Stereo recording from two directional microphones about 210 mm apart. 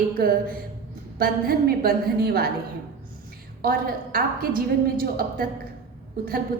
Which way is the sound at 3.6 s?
45° right (ahead or behind).